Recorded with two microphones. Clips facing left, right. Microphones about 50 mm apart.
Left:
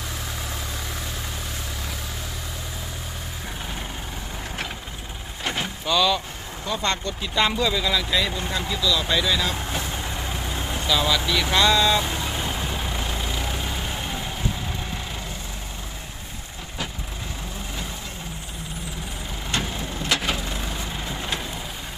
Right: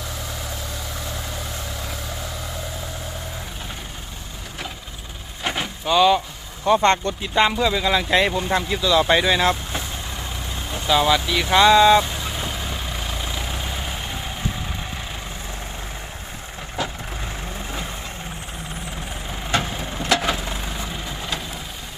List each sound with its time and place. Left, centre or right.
5.5 s vehicle: centre
6.7 s speech: right
7.2 s speech: right
8.1 s speech: right
10.8 s speech: right
12.7 s vehicle: centre